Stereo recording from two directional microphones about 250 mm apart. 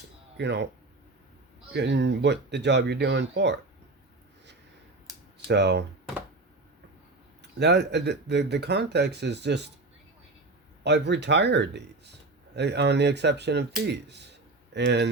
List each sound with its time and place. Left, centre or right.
0.3 s speech: right
1.7 s speech: right
5.5 s speech: right
7.6 s speech: right
10.8 s speech: right